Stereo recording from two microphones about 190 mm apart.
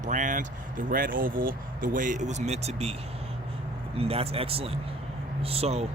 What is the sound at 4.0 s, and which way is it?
Speech, 30° right (ahead or behind).